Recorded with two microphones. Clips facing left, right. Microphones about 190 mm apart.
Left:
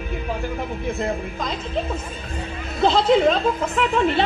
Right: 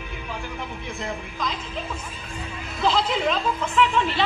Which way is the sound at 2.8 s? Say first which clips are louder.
Left 7 dB; 40° left (ahead or behind).